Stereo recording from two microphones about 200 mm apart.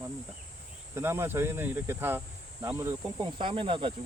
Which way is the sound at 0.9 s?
10° right (ahead or behind).